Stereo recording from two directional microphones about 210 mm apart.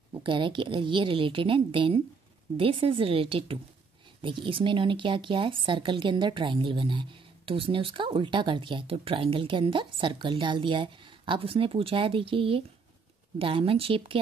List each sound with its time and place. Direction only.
0.1 s speech: 25° right (ahead or behind)